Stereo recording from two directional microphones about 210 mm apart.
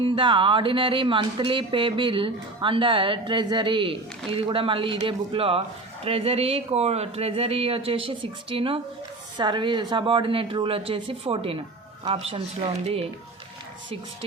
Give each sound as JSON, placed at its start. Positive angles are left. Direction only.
{"t": 0.0, "sound": "speech", "side_deg": -25}